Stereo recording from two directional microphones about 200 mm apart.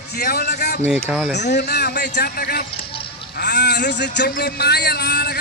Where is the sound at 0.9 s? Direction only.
10° right (ahead or behind).